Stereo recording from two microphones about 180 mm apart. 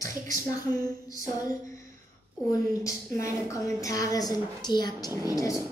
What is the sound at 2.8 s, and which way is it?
A woman's voice, 15° left (ahead or behind).